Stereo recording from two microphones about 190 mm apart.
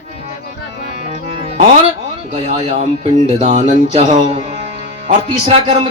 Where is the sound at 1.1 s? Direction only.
30° right (ahead or behind).